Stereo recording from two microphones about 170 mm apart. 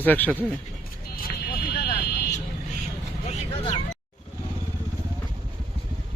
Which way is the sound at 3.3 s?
40° left (ahead or behind).